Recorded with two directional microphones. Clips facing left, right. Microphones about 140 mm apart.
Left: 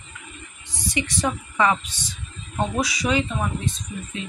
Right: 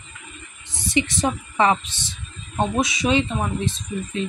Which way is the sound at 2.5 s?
20° right (ahead or behind).